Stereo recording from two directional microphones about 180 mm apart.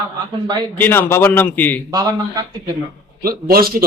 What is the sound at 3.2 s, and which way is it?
Speech, 55° right (ahead or behind).